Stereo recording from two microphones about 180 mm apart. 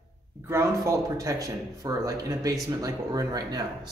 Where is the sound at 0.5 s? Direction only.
15° right (ahead or behind).